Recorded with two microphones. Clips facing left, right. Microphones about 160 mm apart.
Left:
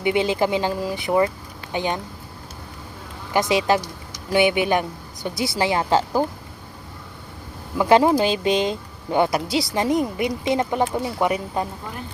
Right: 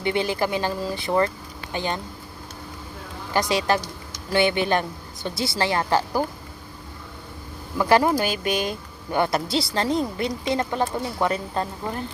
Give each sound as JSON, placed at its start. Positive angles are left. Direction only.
{"t": 0.0, "sound": "speech", "side_deg": 15}
{"t": 3.5, "sound": "speech", "side_deg": 15}
{"t": 7.8, "sound": "speech", "side_deg": 15}